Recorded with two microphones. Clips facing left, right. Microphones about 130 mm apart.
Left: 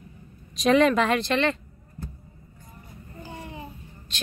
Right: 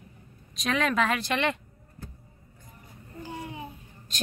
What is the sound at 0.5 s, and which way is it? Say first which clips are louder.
Speech: left 7 dB; centre (ahead or behind).